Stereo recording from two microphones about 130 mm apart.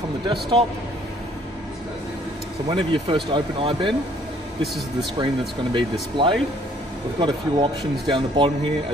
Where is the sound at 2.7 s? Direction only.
40° right (ahead or behind).